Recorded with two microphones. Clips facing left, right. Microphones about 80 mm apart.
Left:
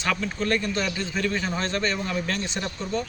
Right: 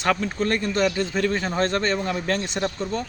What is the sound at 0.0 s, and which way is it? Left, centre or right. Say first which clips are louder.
Speech: right 4 dB; right.